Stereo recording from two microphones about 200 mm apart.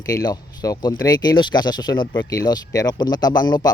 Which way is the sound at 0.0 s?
15° left (ahead or behind).